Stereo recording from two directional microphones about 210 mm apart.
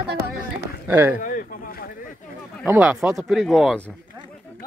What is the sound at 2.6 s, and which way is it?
Speech, 5° right (ahead or behind).